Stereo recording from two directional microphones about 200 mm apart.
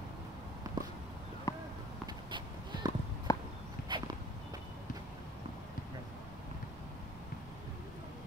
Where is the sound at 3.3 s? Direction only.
15° left (ahead or behind).